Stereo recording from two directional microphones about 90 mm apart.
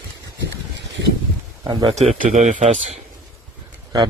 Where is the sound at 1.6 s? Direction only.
50° right (ahead or behind).